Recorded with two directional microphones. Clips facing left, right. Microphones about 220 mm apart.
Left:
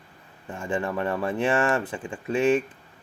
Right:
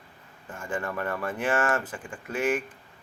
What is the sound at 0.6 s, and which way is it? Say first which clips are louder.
Speech: left 4 dB; 25° left (ahead or behind).